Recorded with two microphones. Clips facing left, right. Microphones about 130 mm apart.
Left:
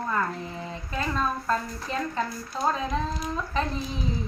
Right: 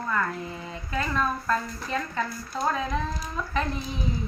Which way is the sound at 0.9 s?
30° left (ahead or behind).